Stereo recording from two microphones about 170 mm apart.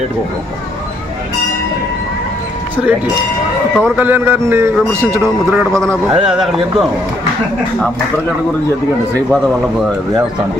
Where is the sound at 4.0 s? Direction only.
10° right (ahead or behind).